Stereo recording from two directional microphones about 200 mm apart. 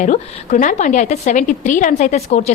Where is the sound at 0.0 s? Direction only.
35° left (ahead or behind).